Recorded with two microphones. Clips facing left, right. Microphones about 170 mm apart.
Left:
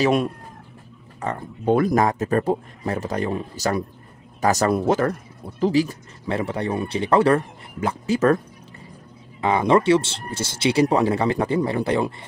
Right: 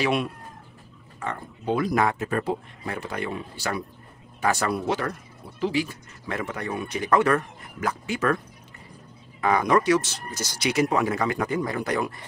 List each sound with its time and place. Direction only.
0.0 s speech: 45° left (ahead or behind)
1.7 s speech: 50° left (ahead or behind)
9.4 s speech: 25° left (ahead or behind)